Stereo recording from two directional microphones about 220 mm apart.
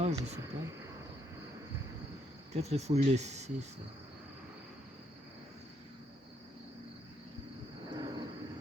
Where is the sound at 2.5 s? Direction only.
30° right (ahead or behind).